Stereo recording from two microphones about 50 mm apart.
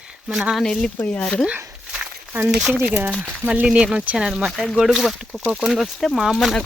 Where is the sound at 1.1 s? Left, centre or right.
Left.